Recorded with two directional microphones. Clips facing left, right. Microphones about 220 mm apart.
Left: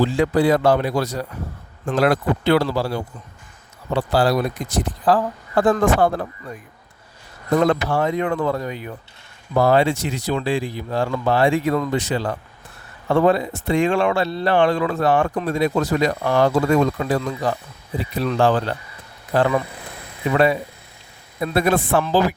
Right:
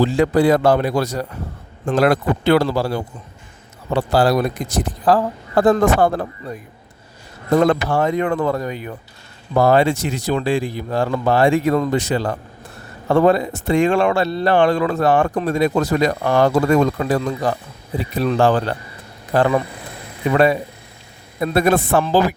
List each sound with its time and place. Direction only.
0.0 s speech: 45° right (ahead or behind)
7.7 s speech: 45° right (ahead or behind)